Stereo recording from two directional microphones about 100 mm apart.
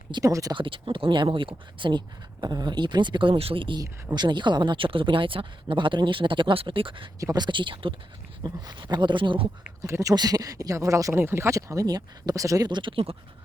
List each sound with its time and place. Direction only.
0.2 s speech: 35° right (ahead or behind)
0.5 s speech: 60° right (ahead or behind)
3.8 s speech: 50° right (ahead or behind)
7.2 s speech: 40° right (ahead or behind); by 7.9 s 60° right (ahead or behind)
8.4 s speech: 45° right (ahead or behind)
9.8 s speech: 30° right (ahead or behind)